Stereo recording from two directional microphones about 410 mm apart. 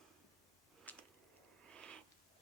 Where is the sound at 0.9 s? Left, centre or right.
Centre.